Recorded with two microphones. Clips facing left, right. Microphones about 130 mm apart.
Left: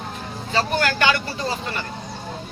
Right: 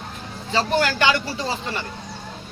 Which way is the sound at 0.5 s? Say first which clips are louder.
Right 1 dB; 25° right (ahead or behind).